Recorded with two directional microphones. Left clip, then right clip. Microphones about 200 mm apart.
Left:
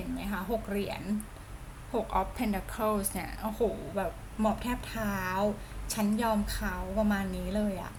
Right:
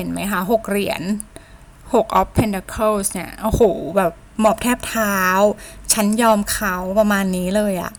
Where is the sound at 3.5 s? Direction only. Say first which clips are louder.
Right 16 dB; 45° right (ahead or behind).